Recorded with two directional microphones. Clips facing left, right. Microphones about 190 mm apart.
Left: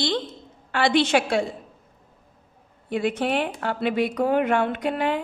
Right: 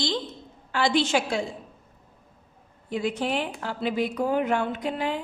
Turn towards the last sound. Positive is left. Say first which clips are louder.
# left 4 dB
turn(degrees=60)  # may be behind; listen again after turning